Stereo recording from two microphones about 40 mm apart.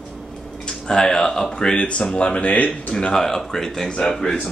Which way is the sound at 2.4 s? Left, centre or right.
Left.